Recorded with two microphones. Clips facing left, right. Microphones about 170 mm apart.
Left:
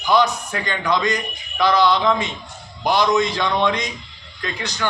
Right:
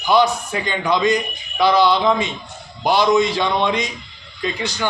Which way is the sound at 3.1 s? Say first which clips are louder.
Right 2 dB; 10° right (ahead or behind).